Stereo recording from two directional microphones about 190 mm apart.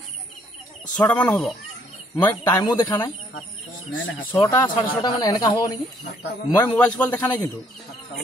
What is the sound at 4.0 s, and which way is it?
Speech, 85° left.